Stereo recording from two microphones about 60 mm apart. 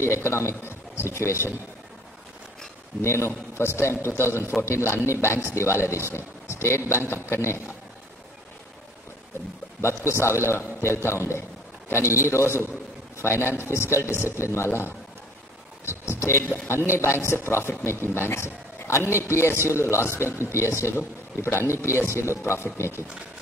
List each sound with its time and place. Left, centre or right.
0.0 s a man's voice: left
3.0 s a man's voice: left
6.1 s vehicle: left
7.1 s a man's voice: left
9.8 s a man's voice: left
15.8 s a sound: left
16.9 s a man's voice: left